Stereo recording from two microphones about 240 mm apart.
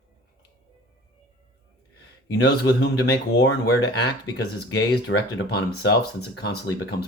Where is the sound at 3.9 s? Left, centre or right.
Left.